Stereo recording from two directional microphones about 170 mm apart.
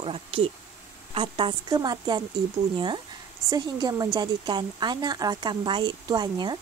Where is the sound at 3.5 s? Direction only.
25° right (ahead or behind).